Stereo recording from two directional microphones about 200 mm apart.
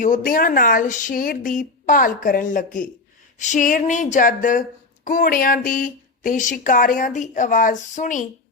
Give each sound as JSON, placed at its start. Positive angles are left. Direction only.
{"t": 0.0, "sound": "speech", "side_deg": 40}